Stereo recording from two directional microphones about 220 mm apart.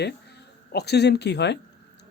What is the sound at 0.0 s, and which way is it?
Speech, 50° left (ahead or behind).